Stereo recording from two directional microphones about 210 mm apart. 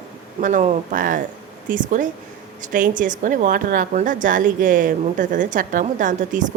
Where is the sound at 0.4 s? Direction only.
40° right (ahead or behind).